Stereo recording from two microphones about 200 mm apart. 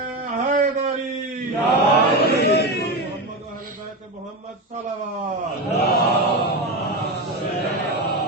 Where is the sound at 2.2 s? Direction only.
55° left (ahead or behind).